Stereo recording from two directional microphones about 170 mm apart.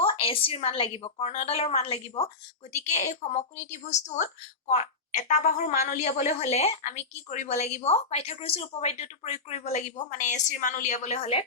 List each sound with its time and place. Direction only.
0.0 s a woman's voice: 35° left (ahead or behind)